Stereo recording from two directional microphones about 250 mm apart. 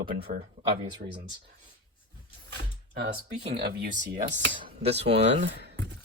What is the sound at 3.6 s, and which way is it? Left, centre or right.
Speech, right.